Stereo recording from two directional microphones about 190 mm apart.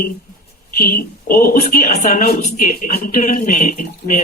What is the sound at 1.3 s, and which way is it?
Speech, 50° left (ahead or behind).